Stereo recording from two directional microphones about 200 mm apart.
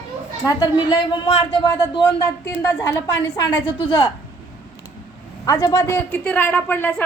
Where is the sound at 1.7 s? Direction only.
15° left (ahead or behind).